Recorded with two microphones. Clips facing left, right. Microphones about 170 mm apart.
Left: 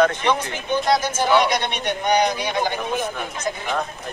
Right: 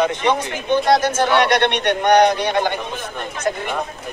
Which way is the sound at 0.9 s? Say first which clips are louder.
Right 1 dB; 65° right (ahead or behind).